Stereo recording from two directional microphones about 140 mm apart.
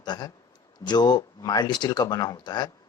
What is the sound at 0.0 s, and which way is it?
Speech, 30° left (ahead or behind).